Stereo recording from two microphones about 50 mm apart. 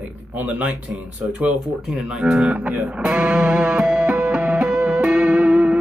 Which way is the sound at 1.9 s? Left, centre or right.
Centre.